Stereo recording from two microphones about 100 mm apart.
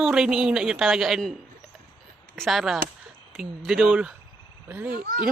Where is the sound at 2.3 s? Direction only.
Centre (ahead or behind); by 4.9 s 20° right (ahead or behind).